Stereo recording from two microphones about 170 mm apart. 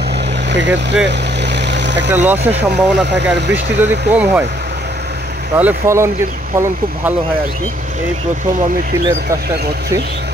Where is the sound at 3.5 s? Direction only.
10° right (ahead or behind).